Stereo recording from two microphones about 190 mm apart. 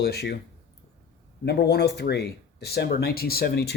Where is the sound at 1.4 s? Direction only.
60° left (ahead or behind).